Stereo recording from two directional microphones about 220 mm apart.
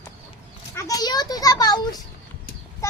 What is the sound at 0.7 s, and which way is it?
A child's voice, 15° left (ahead or behind).